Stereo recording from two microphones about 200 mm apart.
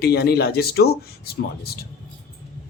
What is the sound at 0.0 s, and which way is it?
Speech, 55° left (ahead or behind).